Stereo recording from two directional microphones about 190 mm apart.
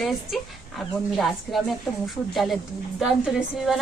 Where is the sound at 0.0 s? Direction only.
Centre (ahead or behind).